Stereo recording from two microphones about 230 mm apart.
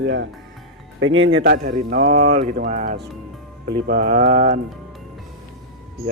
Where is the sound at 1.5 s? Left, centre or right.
Right.